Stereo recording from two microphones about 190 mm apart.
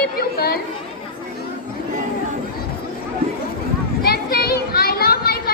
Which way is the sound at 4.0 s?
50° left (ahead or behind).